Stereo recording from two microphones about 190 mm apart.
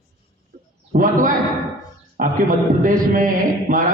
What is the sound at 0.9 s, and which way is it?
Speech, 45° right (ahead or behind).